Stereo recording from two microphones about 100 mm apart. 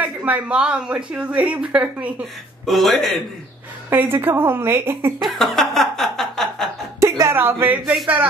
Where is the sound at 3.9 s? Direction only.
20° right (ahead or behind).